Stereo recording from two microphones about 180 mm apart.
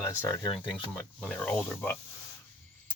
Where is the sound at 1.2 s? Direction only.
5° left (ahead or behind).